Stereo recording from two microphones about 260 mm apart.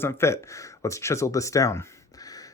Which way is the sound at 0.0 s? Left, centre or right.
Centre.